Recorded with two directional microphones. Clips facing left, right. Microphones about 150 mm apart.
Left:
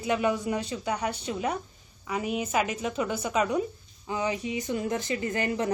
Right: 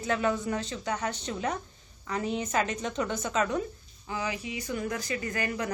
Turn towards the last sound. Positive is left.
turn(degrees=25)  # may be behind; listen again after turning